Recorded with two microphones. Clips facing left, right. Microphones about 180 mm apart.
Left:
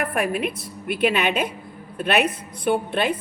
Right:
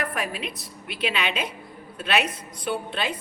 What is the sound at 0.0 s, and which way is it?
A woman's voice, 55° left (ahead or behind).